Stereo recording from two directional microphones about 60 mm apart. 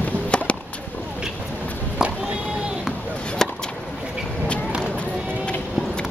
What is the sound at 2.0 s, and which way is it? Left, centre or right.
Music, centre.